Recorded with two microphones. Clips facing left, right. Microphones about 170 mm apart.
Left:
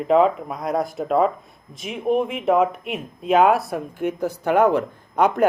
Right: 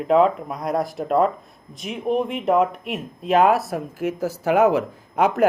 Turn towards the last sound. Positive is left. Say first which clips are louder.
# left 1 dB
turn(degrees=-5)  # may be behind; listen again after turning